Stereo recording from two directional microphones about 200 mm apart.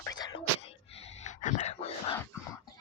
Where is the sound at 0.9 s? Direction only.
30° left (ahead or behind).